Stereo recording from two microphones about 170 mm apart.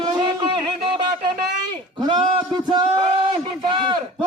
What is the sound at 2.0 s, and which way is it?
A man's voice, 25° right (ahead or behind).